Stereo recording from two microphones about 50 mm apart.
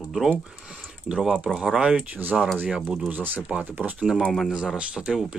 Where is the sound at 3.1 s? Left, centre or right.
Right.